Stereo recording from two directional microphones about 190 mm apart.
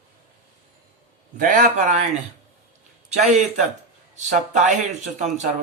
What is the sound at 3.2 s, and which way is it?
Speech, 35° right (ahead or behind).